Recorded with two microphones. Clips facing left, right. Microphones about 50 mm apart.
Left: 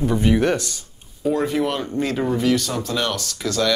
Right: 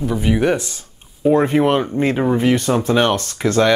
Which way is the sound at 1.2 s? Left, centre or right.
Right.